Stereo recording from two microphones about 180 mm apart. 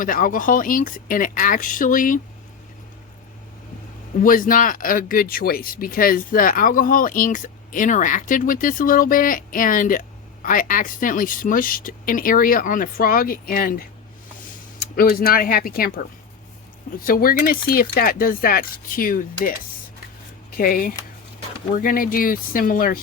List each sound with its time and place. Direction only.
0.0 s speech: 50° left (ahead or behind)
4.2 s speech: 50° left (ahead or behind)
17.0 s speech: 50° left (ahead or behind)
20.6 s speech: 50° left (ahead or behind)